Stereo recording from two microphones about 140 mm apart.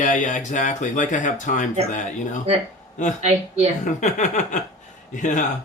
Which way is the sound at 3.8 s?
60° left (ahead or behind).